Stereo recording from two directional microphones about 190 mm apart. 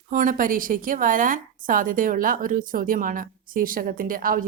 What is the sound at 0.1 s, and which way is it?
A woman's voice, 45° right (ahead or behind).